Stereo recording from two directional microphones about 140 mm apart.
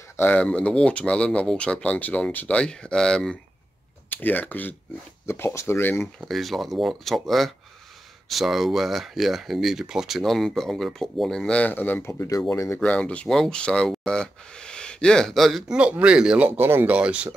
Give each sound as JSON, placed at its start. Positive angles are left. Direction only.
{"t": 0.2, "sound": "speech", "side_deg": 10}
{"t": 6.2, "sound": "speech", "side_deg": 0}